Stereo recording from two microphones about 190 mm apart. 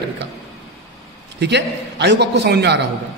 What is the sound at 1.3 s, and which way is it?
A man's voice, 65° right (ahead or behind).